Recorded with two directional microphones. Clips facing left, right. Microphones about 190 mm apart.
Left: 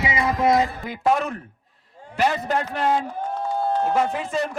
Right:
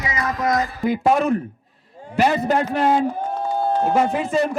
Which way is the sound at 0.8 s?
10° right (ahead or behind).